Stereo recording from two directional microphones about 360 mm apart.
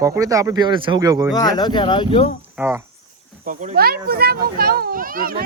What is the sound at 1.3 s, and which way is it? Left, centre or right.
Speech, centre.